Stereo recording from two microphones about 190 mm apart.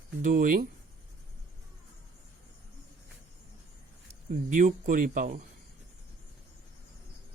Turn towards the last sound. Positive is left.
turn(degrees=-45)  # may be behind; listen again after turning